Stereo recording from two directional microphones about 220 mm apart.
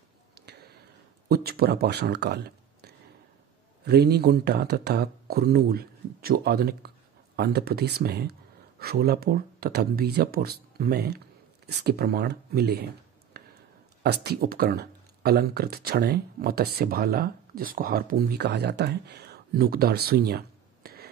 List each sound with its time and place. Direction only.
1.3 s a man's voice: 45° right (ahead or behind)
13.4 s a sound: 45° right (ahead or behind)
14.0 s speech: 45° right (ahead or behind)